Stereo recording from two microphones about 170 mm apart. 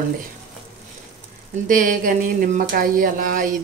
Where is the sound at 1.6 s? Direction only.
50° right (ahead or behind).